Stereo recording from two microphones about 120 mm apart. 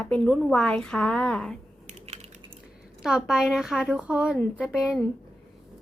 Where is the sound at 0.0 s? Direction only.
10° left (ahead or behind).